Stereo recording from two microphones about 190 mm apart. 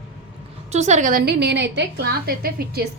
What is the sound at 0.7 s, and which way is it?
A woman's voice, 35° right (ahead or behind).